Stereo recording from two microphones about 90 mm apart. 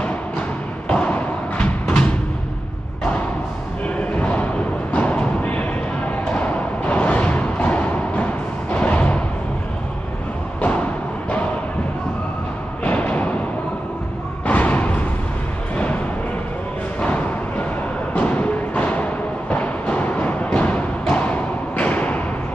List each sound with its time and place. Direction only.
0.8 s thump: 15° left (ahead or behind)
4.2 s a sound: 15° left (ahead or behind)
4.9 s music: 15° left (ahead or behind)
12.8 s a sound: 20° left (ahead or behind)
14.4 s music: 15° left (ahead or behind)
17.0 s music: 20° left (ahead or behind)
21.1 s thump: 15° left (ahead or behind)